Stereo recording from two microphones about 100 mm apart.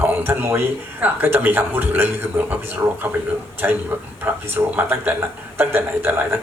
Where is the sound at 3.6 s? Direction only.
20° right (ahead or behind).